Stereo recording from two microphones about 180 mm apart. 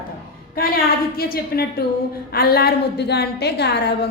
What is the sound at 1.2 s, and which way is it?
A woman's voice, 55° left (ahead or behind).